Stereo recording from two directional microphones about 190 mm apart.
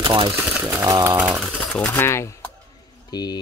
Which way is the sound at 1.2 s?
5° right (ahead or behind).